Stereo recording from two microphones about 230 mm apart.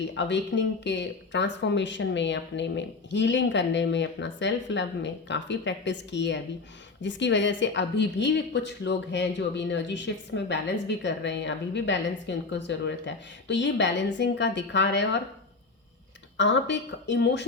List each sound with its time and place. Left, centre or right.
0.1 s speech: left
16.4 s speech: left